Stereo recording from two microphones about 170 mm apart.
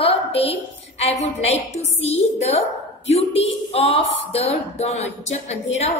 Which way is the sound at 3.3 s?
35° left (ahead or behind).